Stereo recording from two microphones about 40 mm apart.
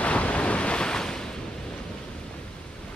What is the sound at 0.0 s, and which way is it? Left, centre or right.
Waves, left.